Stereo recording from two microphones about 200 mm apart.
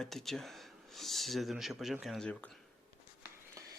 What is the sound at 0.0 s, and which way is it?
Speech, centre (ahead or behind).